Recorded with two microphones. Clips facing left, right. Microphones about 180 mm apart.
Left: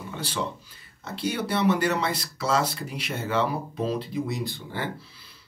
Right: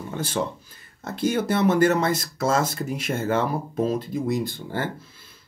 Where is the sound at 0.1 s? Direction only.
50° right (ahead or behind).